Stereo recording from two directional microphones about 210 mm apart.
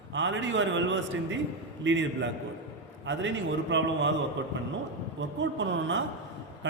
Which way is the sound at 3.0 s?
60° right (ahead or behind).